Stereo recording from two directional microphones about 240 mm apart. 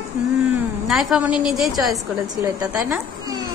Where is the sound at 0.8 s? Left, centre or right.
Centre.